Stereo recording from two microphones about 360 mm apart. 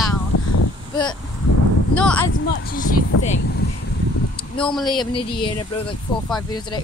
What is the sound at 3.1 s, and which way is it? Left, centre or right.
Speech, left.